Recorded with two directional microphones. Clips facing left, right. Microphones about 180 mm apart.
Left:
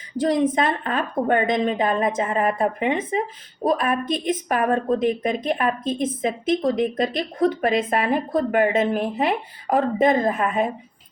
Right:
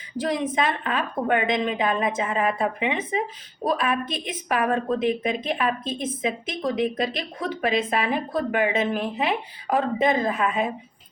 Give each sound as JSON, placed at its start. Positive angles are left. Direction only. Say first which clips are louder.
{"t": 0.3, "sound": "a woman's voice", "louder": "left 4 dB", "side_deg": 45}